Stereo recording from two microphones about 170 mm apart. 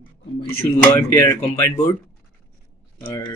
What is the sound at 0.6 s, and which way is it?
Speech, 15° left (ahead or behind).